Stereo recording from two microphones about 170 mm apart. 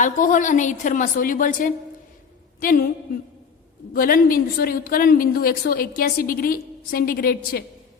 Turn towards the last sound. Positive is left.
turn(degrees=60)  # may be behind; listen again after turning